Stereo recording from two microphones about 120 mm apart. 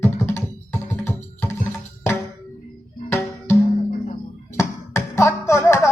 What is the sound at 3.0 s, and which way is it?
Music, 20° left (ahead or behind).